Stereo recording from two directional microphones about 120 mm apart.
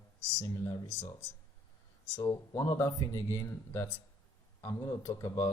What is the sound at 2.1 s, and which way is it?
Speech, 25° left (ahead or behind).